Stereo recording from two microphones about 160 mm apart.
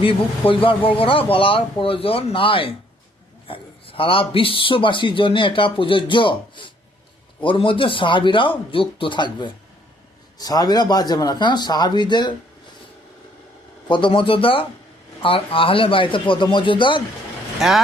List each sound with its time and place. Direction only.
0.0 s speech: 35° left (ahead or behind)
13.8 s speech: 30° left (ahead or behind)
17.6 s speech: centre (ahead or behind)